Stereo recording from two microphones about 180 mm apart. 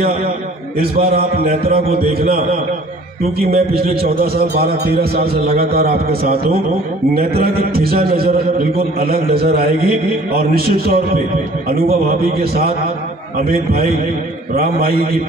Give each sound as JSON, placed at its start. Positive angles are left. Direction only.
{"t": 0.7, "sound": "a man's voice", "side_deg": -55}
{"t": 3.3, "sound": "a man's voice", "side_deg": -55}